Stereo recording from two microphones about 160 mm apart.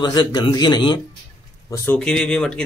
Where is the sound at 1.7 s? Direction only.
10° left (ahead or behind).